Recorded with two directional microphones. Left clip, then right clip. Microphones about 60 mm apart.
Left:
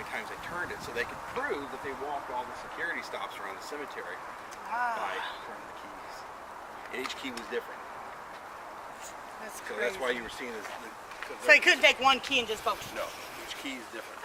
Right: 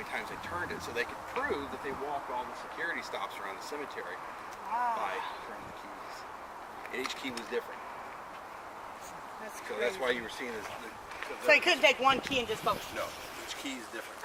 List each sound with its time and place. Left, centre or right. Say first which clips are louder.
0.1 s speech: right 1 dB; centre
4.7 s speech: even; left
7.5 s speech: even; centre
9.7 s speech: even; centre
11.4 s speech: left 3 dB; left